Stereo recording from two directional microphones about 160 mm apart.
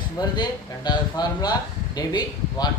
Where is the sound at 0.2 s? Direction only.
25° left (ahead or behind).